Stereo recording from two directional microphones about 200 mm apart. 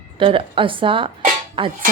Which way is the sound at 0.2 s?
25° right (ahead or behind).